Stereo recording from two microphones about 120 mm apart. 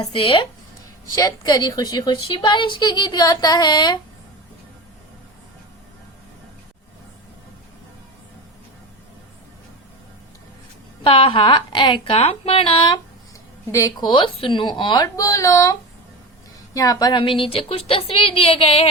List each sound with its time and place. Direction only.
0.0 s a woman's voice: 50° left (ahead or behind)
1.2 s a woman's voice: 35° left (ahead or behind)
11.0 s a woman's voice: 50° left (ahead or behind)
13.7 s speech: 30° left (ahead or behind)
14.1 s a woman's voice: 40° left (ahead or behind); by 15.7 s 25° left (ahead or behind)
16.7 s a woman's voice: 30° left (ahead or behind); by 18.9 s 55° left (ahead or behind)